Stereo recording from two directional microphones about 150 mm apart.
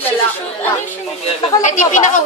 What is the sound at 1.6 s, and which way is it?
Speech, 55° left (ahead or behind).